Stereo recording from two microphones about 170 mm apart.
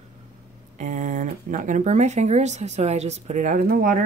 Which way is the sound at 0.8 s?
50° right (ahead or behind).